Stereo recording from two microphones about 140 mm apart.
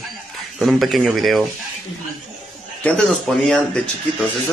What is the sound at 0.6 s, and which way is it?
Speech, centre (ahead or behind).